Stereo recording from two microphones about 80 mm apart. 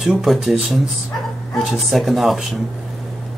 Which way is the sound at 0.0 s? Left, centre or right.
Centre.